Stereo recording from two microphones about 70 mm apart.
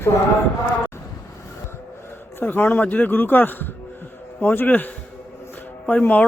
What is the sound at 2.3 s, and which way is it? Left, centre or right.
Speech, left.